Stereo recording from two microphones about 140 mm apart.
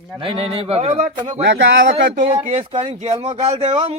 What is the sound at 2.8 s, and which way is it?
Speech, 50° right (ahead or behind).